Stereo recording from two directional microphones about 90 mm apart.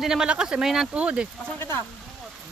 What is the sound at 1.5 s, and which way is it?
Speech, 25° left (ahead or behind).